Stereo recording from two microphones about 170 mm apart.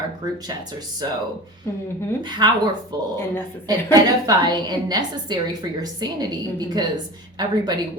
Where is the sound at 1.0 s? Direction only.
25° right (ahead or behind).